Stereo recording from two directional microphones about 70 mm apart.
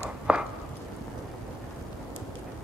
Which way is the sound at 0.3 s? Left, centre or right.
Centre.